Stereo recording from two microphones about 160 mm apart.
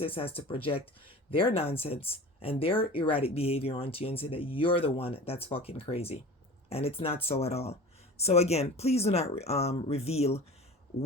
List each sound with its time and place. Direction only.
0.0 s speech: 35° left (ahead or behind)